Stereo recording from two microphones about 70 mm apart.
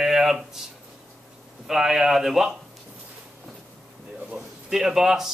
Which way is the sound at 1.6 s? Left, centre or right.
Centre.